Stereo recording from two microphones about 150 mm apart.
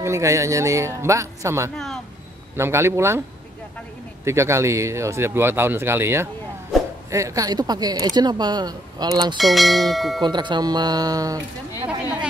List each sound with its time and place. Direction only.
0.0 s speech: 20° right (ahead or behind)
4.2 s speech: 20° right (ahead or behind)
9.4 s bell: centre (ahead or behind)
10.2 s speech: 30° right (ahead or behind)